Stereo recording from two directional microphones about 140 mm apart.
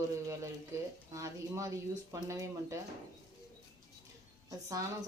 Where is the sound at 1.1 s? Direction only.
20° right (ahead or behind).